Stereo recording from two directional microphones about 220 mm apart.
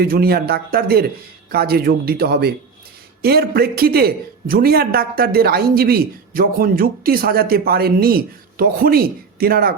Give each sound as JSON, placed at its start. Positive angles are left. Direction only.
{"t": 0.0, "sound": "a man's voice", "side_deg": -45}